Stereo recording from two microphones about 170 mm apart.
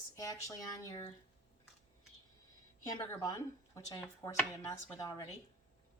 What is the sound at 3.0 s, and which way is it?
A woman's voice, 20° left (ahead or behind).